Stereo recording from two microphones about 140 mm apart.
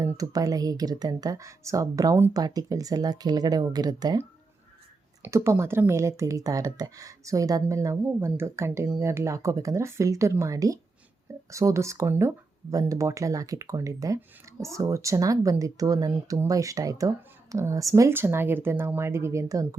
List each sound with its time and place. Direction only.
0.0 s speech: 25° right (ahead or behind)
5.2 s speech: 20° right (ahead or behind)